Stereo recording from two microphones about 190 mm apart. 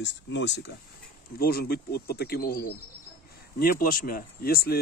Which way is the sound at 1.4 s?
55° left (ahead or behind).